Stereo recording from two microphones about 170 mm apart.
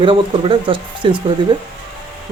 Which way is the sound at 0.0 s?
30° right (ahead or behind).